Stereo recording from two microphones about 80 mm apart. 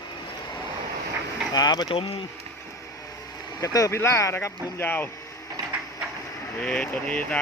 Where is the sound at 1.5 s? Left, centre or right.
Left.